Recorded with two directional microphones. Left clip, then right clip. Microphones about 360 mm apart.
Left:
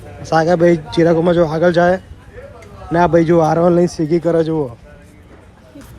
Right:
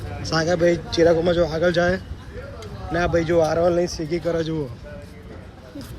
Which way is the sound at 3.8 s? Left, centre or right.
Left.